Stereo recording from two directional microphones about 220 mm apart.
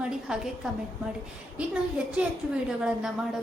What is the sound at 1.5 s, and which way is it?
A woman's voice, 5° right (ahead or behind).